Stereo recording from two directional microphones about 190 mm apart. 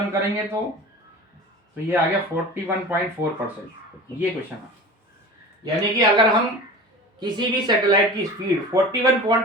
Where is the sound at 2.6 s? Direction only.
10° right (ahead or behind).